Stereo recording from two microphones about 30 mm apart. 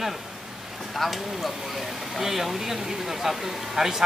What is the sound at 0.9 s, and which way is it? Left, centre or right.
Speech, centre.